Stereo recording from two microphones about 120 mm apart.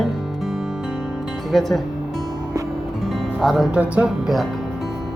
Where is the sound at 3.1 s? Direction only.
Centre (ahead or behind).